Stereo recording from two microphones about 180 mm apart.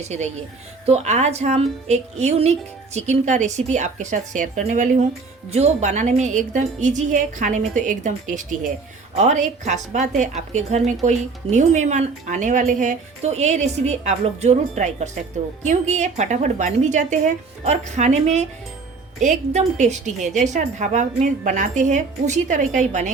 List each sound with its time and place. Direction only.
0.9 s a woman's voice: 35° right (ahead or behind)